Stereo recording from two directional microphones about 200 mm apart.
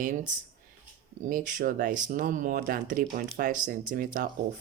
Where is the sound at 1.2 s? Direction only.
40° right (ahead or behind).